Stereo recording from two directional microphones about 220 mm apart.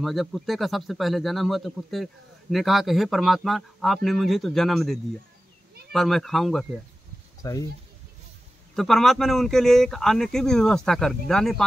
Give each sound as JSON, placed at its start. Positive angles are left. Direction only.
{"t": 0.0, "sound": "speech", "side_deg": 0}
{"t": 7.4, "sound": "speech", "side_deg": 15}
{"t": 8.7, "sound": "speech", "side_deg": 0}